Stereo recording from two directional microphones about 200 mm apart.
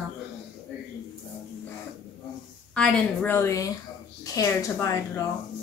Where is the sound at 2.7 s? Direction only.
5° left (ahead or behind).